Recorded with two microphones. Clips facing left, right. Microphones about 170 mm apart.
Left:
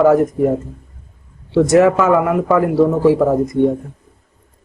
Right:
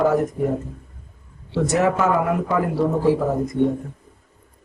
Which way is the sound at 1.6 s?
90° left.